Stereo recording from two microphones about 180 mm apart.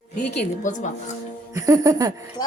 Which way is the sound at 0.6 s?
45° left (ahead or behind).